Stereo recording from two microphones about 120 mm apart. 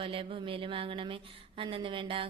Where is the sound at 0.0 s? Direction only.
50° right (ahead or behind).